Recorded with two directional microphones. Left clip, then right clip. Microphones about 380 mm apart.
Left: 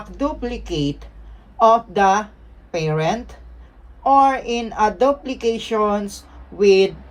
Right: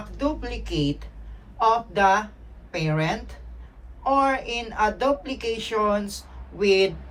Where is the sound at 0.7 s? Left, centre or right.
Centre.